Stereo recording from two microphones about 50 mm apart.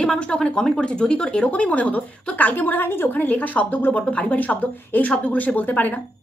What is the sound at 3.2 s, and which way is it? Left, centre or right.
Speech, left.